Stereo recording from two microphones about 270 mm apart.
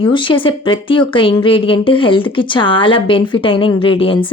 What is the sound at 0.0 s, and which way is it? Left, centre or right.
A woman's voice, centre.